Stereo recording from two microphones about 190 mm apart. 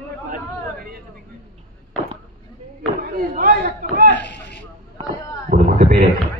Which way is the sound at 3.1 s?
50° right (ahead or behind).